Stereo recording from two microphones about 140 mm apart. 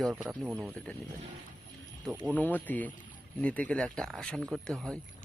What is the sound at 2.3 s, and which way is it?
Speech, 15° left (ahead or behind).